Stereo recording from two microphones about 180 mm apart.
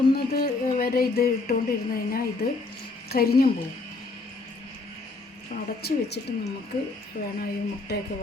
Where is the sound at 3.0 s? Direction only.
55° left (ahead or behind).